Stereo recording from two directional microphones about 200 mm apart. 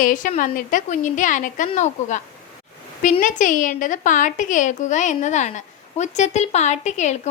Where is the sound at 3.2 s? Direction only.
40° left (ahead or behind).